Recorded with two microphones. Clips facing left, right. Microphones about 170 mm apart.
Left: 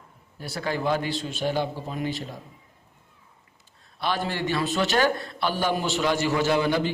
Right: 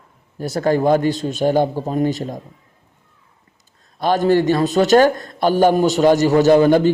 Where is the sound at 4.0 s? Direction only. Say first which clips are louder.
Right 12 dB; 45° right (ahead or behind).